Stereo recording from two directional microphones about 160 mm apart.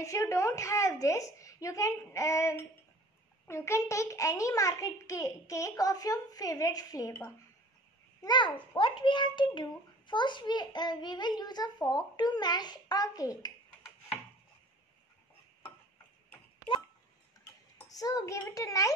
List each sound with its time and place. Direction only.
0.0 s a child's voice: 20° left (ahead or behind)
8.2 s a child's voice: 30° left (ahead or behind)
17.7 s a child's voice: 25° left (ahead or behind)